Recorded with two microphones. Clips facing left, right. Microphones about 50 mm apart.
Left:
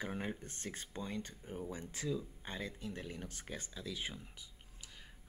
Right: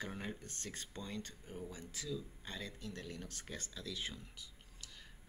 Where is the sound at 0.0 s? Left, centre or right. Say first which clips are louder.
Left 3 dB; centre.